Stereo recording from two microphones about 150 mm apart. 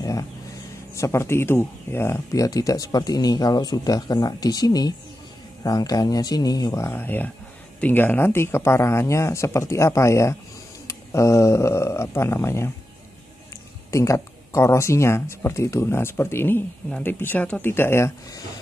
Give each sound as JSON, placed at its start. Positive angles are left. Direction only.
{"t": 0.0, "sound": "speech", "side_deg": 25}
{"t": 13.8, "sound": "speech", "side_deg": 20}